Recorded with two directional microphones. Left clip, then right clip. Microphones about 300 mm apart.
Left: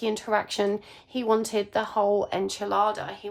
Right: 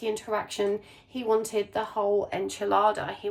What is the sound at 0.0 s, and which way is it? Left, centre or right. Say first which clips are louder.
A woman's voice: left 3 dB; centre.